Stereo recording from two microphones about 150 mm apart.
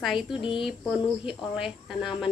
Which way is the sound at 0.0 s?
Centre (ahead or behind).